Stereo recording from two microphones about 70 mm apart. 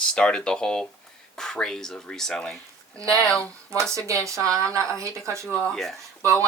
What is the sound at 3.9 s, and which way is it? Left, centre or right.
Speech, right.